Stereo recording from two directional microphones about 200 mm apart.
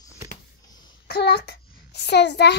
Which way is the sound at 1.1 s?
55° left (ahead or behind).